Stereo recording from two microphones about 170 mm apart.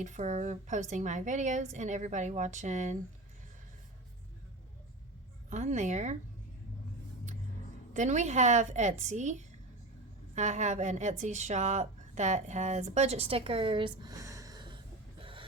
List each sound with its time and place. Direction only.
0.0 s a woman's voice: 45° right (ahead or behind)
5.5 s a woman's voice: 45° right (ahead or behind)
7.9 s a woman's voice: 45° right (ahead or behind)
10.3 s speech: 45° right (ahead or behind); by 14.8 s 25° right (ahead or behind)
15.2 s a sound: 30° right (ahead or behind)